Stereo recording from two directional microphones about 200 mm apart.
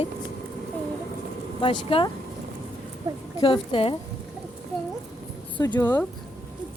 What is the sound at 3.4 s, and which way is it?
Speech, 25° left (ahead or behind).